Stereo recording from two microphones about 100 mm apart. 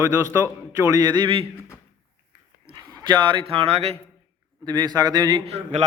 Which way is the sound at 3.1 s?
50° right (ahead or behind).